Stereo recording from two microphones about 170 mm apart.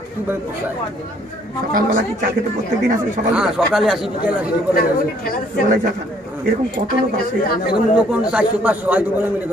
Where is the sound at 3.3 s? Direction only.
5° right (ahead or behind).